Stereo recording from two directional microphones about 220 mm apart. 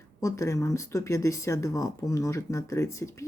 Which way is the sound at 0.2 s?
15° left (ahead or behind).